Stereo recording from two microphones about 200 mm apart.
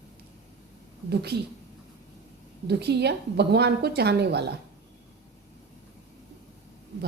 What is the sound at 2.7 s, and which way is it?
A woman's voice, 55° right (ahead or behind).